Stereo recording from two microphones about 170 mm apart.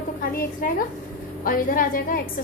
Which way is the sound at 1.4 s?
55° left (ahead or behind).